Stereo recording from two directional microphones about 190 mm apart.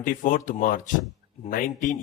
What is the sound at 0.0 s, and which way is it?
A man's voice, 45° left (ahead or behind).